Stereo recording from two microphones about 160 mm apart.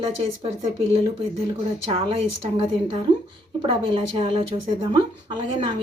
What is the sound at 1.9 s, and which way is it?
Speech, 35° right (ahead or behind).